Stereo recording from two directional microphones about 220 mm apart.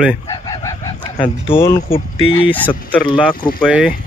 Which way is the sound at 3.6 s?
5° right (ahead or behind).